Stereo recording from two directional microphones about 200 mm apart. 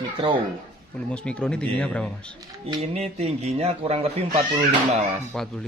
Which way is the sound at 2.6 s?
30° right (ahead or behind).